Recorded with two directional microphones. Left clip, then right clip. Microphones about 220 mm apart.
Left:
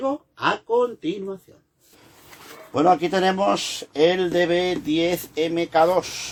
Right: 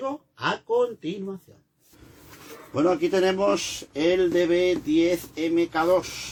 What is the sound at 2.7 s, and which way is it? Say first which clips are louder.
Speech: left 4 dB; 35° left (ahead or behind).